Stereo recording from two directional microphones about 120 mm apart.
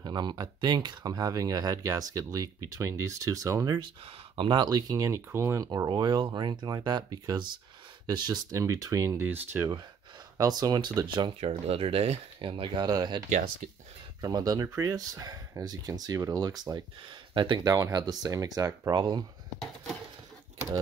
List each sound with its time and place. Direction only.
0.0 s speech: 35° right (ahead or behind)
3.8 s speech: 45° right (ahead or behind); by 9.2 s 30° right (ahead or behind)
9.2 s speech: 20° right (ahead or behind)
10.3 s speech: 30° right (ahead or behind)
11.3 s speech: 60° right (ahead or behind); by 13.2 s 35° right (ahead or behind)
14.2 s speech: 35° right (ahead or behind)